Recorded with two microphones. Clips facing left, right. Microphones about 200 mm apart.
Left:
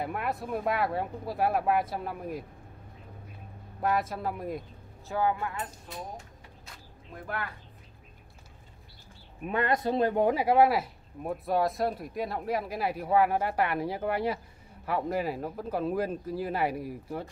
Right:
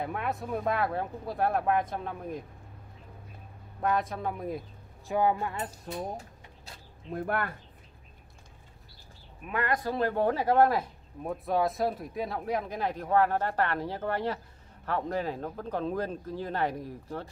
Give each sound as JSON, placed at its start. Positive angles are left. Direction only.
{"t": 0.0, "sound": "speech", "side_deg": 5}
{"t": 3.8, "sound": "speech", "side_deg": 5}
{"t": 5.0, "sound": "speech", "side_deg": -20}
{"t": 6.1, "sound": "a sound", "side_deg": -30}
{"t": 7.2, "sound": "speech", "side_deg": -55}
{"t": 9.5, "sound": "speech", "side_deg": 25}